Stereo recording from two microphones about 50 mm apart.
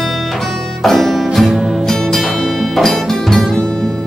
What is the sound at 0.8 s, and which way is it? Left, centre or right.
Music, centre.